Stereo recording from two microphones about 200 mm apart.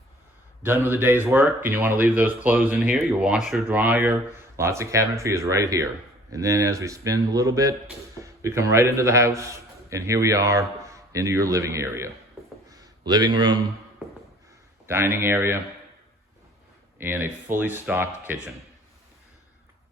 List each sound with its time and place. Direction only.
0.6 s a man's voice: 10° right (ahead or behind)
14.8 s speech: 10° right (ahead or behind)
17.0 s speech: 10° right (ahead or behind)